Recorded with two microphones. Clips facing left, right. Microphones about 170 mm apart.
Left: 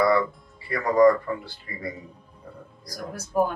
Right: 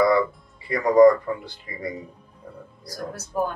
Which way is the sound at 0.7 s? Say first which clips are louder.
Right 3 dB; 20° right (ahead or behind).